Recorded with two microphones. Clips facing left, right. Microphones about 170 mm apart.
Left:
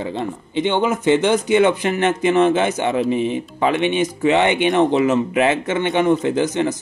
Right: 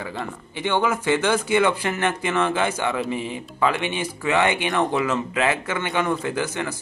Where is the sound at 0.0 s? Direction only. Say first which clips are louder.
Left 6 dB; 20° left (ahead or behind).